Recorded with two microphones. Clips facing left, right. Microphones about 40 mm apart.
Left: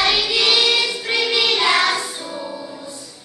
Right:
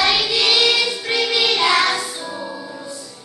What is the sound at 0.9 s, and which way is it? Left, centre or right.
Music, centre.